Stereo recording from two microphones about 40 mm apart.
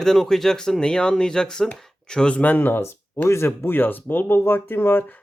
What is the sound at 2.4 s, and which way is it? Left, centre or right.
Speech, left.